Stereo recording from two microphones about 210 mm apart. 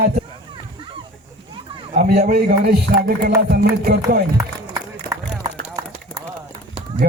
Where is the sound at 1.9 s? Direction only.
40° right (ahead or behind).